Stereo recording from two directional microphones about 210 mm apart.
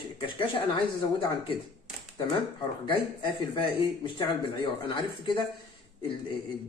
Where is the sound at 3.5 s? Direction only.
25° left (ahead or behind).